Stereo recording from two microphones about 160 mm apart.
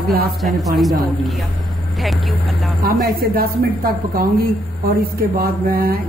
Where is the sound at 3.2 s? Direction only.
65° right (ahead or behind).